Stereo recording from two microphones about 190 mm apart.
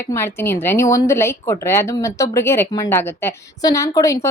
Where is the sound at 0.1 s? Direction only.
15° left (ahead or behind).